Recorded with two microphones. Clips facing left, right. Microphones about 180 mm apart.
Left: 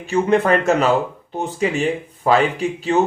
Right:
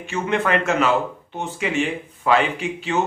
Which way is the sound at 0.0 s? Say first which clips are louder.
Left 6 dB; 35° left (ahead or behind).